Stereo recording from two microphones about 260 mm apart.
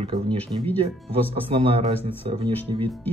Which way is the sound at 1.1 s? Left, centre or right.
Right.